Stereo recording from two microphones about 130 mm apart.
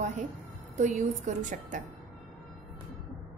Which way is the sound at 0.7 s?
70° right (ahead or behind).